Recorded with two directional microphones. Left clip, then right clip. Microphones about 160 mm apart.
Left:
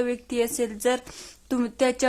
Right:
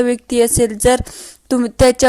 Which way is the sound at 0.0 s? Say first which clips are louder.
Right 11 dB; 35° right (ahead or behind).